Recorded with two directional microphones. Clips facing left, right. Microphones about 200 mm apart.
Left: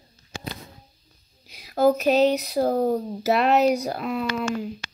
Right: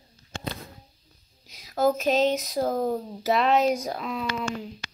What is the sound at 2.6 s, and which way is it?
Speech, 35° left (ahead or behind).